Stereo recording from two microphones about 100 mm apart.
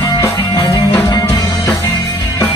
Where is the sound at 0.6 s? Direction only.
40° left (ahead or behind).